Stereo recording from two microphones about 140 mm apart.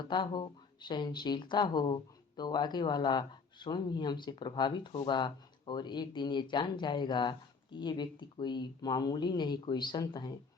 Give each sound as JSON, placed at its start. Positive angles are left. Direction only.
{"t": 0.0, "sound": "speech", "side_deg": 35}